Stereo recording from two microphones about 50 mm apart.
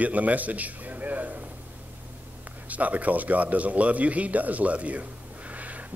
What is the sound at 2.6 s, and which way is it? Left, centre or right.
Speech, right.